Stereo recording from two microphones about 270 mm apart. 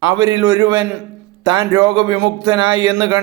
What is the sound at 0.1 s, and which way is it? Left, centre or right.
A man's voice, centre.